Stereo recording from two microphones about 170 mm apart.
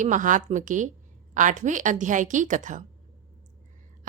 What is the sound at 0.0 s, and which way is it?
Speech, 50° right (ahead or behind).